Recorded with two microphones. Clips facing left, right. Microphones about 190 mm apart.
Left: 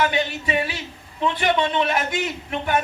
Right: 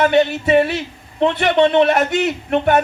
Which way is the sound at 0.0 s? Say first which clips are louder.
Right 8 dB; 60° right (ahead or behind).